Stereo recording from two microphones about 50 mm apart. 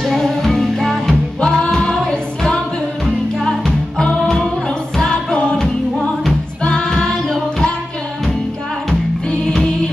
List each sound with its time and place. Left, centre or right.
0.0 s music: centre
1.4 s music: centre
3.3 s music: centre
5.6 s music: centre
6.6 s music: centre